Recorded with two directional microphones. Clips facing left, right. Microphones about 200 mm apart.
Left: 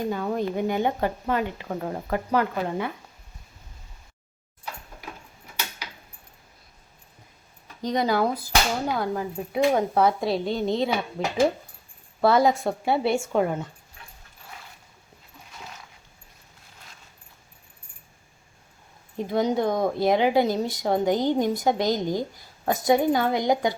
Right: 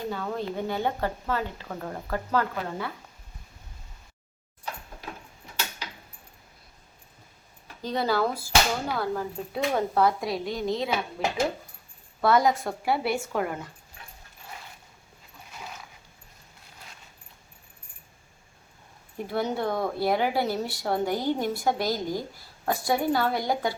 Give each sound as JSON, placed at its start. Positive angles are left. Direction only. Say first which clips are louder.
{"t": 0.1, "sound": "a woman's voice", "louder": "left 5 dB", "side_deg": 15}
{"t": 7.8, "sound": "speech", "louder": "left 3 dB", "side_deg": 15}
{"t": 12.2, "sound": "speech", "louder": "left 3 dB", "side_deg": 25}
{"t": 19.1, "sound": "speech", "louder": "left 5 dB", "side_deg": 15}